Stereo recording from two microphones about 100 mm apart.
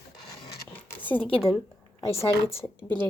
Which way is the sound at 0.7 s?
20° left (ahead or behind).